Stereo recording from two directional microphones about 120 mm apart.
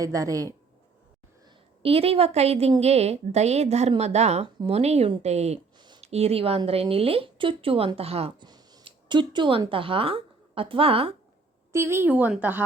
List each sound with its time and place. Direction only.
0.0 s a woman's voice: 30° right (ahead or behind)
1.8 s a woman's voice: 55° right (ahead or behind)
8.4 s speech: 35° right (ahead or behind); by 11.1 s 50° right (ahead or behind)
11.7 s a woman's voice: 20° right (ahead or behind)